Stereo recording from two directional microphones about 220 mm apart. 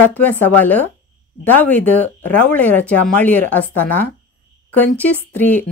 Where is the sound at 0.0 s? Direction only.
10° left (ahead or behind).